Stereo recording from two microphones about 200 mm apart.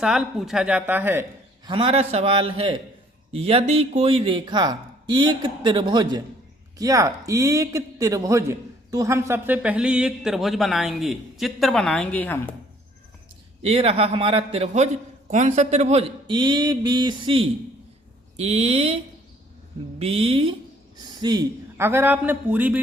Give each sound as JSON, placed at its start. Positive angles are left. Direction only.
{"t": 0.0, "sound": "speech", "side_deg": 0}
{"t": 1.6, "sound": "a man's voice", "side_deg": -25}
{"t": 13.6, "sound": "speech", "side_deg": -30}
{"t": 20.0, "sound": "a man's voice", "side_deg": -30}